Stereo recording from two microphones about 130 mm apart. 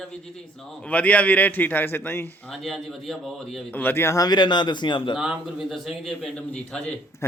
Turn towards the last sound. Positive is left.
turn(degrees=5)  # may be behind; listen again after turning